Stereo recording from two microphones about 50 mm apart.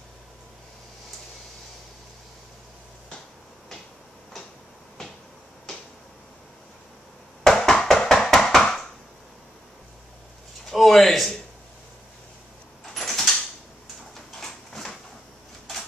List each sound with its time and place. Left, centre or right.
7.4 s bouncing: centre
10.6 s speech: centre
12.9 s a sound: centre